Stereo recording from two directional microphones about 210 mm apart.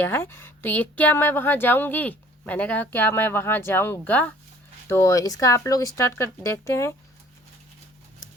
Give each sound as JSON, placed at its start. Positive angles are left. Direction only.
{"t": 0.0, "sound": "speech", "side_deg": 10}